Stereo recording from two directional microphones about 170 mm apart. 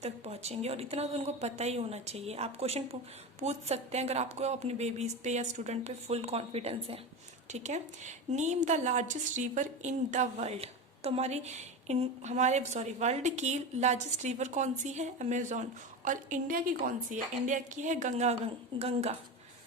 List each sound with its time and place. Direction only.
0.0 s a woman's voice: 40° right (ahead or behind)